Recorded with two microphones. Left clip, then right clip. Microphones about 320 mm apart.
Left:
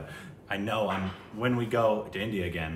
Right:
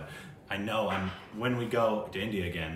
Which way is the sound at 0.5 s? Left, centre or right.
Centre.